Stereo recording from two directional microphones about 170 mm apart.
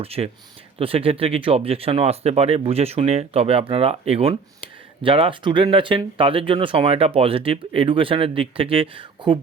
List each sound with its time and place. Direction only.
0.0 s speech: 35° right (ahead or behind)